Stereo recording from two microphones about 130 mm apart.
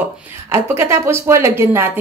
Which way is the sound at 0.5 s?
20° right (ahead or behind).